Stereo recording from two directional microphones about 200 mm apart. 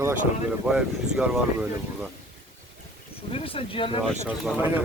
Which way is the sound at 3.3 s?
30° left (ahead or behind).